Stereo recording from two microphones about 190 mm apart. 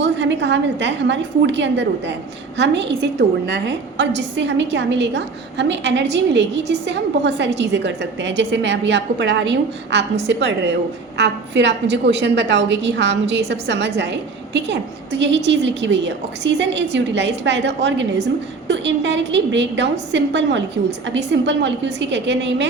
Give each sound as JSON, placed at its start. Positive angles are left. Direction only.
{"t": 0.0, "sound": "a woman's voice", "side_deg": -70}